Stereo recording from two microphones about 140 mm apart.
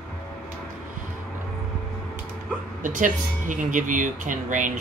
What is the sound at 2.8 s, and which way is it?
A man's voice, 65° right (ahead or behind).